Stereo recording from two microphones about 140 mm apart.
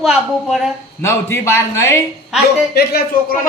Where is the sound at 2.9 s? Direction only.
90° left.